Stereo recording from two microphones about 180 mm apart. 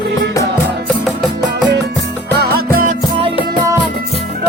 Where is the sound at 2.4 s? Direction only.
60° right (ahead or behind).